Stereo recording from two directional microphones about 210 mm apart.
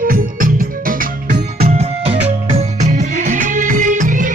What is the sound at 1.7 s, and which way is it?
Music, 30° right (ahead or behind).